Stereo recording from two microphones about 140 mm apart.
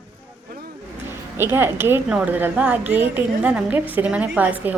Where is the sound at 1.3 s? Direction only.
15° right (ahead or behind).